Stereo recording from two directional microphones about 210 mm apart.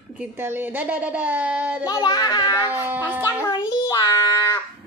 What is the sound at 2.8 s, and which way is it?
Speech, 10° right (ahead or behind).